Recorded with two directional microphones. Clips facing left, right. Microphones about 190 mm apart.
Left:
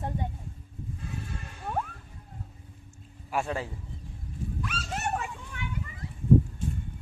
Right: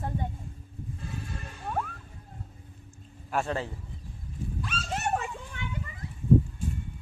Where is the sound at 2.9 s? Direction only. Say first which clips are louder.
Right 1 dB; 10° left (ahead or behind).